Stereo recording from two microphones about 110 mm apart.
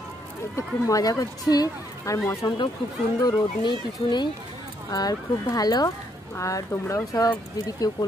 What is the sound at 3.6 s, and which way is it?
Speech, 45° left (ahead or behind).